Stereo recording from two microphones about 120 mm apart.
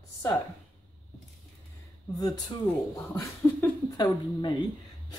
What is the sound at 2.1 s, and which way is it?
Speech, 30° left (ahead or behind).